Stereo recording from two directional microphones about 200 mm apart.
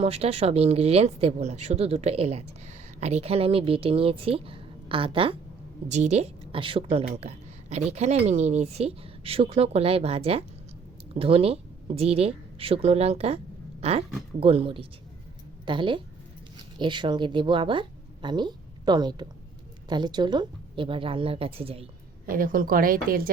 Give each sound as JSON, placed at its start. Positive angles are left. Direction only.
{"t": 0.0, "sound": "a woman's voice", "side_deg": -30}
{"t": 22.3, "sound": "speech", "side_deg": -45}